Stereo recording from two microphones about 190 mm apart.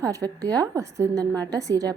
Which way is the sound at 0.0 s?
15° right (ahead or behind).